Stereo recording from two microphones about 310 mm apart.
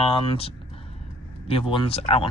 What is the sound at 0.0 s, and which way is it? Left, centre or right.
Speech, centre.